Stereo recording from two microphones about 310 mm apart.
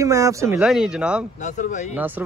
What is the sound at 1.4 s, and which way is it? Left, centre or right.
Speech, left.